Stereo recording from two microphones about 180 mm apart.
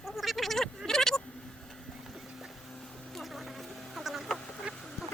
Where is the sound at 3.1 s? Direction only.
Centre (ahead or behind).